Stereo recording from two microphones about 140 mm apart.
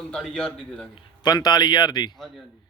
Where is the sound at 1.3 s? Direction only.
30° left (ahead or behind).